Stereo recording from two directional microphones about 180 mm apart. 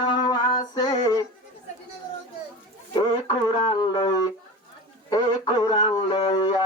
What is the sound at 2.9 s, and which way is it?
Music, 25° left (ahead or behind).